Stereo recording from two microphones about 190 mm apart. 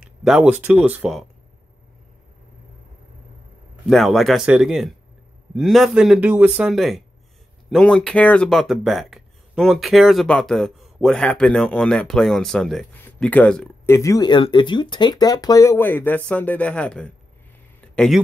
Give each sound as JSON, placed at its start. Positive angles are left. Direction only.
{"t": 0.0, "sound": "speech", "side_deg": -5}
{"t": 3.8, "sound": "speech", "side_deg": 0}
{"t": 17.7, "sound": "a sound", "side_deg": 5}